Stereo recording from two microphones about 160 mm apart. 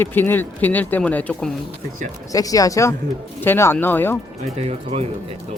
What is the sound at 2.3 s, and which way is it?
Speech, 20° left (ahead or behind).